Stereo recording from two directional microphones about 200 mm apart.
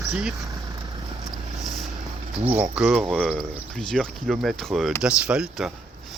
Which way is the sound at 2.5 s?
5° right (ahead or behind).